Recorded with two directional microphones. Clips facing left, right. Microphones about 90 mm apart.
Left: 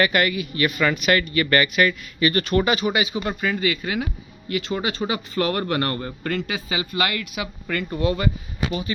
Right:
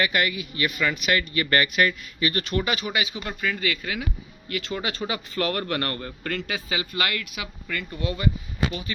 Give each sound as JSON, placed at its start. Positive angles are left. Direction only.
{"t": 0.0, "sound": "speech", "side_deg": 55}
{"t": 2.4, "sound": "speech", "side_deg": 45}
{"t": 2.6, "sound": "speech", "side_deg": 30}
{"t": 7.7, "sound": "speech", "side_deg": 50}